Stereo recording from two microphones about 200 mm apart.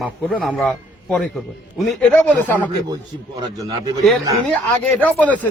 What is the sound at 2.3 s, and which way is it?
Speech, 10° left (ahead or behind).